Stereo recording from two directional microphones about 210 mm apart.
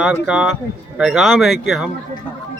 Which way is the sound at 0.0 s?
5° right (ahead or behind).